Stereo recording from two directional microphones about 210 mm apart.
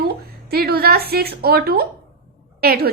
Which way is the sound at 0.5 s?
45° right (ahead or behind).